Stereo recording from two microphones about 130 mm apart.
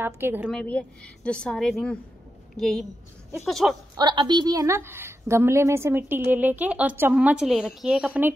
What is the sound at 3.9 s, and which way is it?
A woman's voice, 35° right (ahead or behind).